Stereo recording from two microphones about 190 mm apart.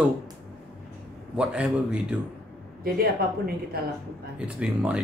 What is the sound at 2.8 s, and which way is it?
Speech, 50° right (ahead or behind).